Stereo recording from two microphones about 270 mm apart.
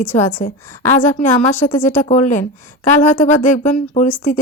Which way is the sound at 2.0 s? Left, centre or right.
Left.